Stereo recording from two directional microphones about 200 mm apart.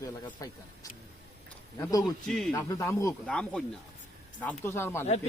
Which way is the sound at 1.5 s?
15° left (ahead or behind).